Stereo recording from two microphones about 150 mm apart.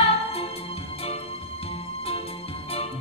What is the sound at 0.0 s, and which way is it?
Music, 40° left (ahead or behind).